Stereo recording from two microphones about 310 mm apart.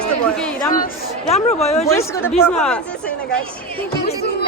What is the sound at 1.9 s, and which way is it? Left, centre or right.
Speech, centre.